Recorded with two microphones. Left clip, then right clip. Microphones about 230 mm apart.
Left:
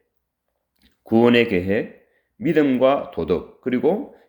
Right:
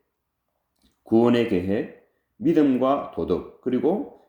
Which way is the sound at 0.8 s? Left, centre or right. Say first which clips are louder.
Left 3 dB; left.